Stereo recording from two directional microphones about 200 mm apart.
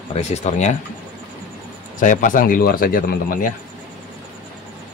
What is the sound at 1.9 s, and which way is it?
Speech, 40° left (ahead or behind).